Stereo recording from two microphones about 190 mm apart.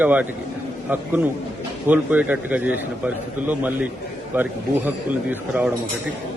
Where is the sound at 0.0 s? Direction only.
10° right (ahead or behind).